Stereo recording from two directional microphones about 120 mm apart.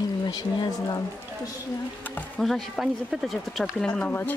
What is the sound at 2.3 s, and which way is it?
Speech, centre (ahead or behind).